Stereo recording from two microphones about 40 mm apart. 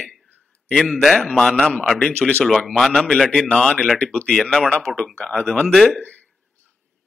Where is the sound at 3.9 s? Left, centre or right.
Left.